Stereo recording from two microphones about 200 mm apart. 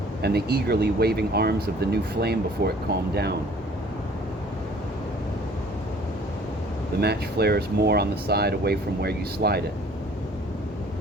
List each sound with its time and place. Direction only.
0.2 s speech: 55° right (ahead or behind)
7.0 s speech: 55° right (ahead or behind)